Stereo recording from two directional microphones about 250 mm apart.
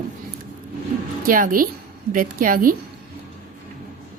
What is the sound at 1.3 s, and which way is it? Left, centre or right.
A woman's voice, right.